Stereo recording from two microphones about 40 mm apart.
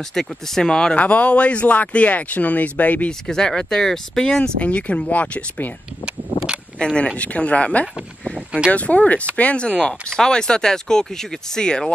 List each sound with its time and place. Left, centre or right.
0.1 s speech: centre
0.9 s speech: left
3.1 s speech: centre
4.4 s speech: left
6.8 s speech: left
9.7 s speech: left